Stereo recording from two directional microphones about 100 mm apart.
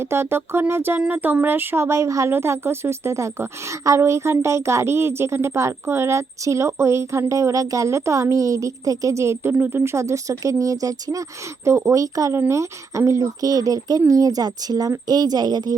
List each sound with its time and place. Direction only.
0.0 s speech: 25° right (ahead or behind); by 15.7 s 45° right (ahead or behind)